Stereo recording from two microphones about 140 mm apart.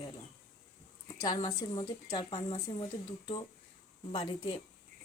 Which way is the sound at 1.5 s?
30° left (ahead or behind).